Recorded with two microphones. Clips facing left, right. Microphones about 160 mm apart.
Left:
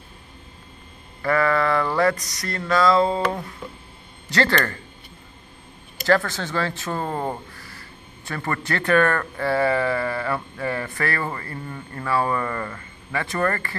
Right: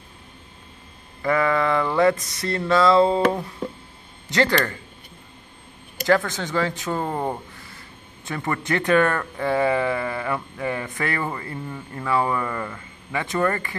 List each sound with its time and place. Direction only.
1.2 s a sound: 20° right (ahead or behind)
4.3 s speech: 15° right (ahead or behind)
6.0 s speech: 15° right (ahead or behind)